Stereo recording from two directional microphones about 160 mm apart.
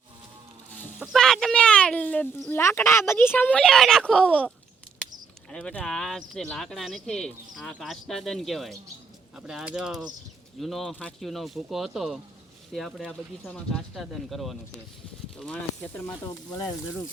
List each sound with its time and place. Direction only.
0.9 s speech: 5° right (ahead or behind)
16.5 s speech: 25° left (ahead or behind)